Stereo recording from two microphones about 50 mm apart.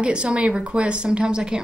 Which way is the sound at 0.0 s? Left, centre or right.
Centre.